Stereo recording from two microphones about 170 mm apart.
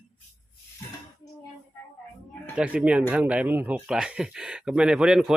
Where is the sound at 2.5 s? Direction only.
5° right (ahead or behind).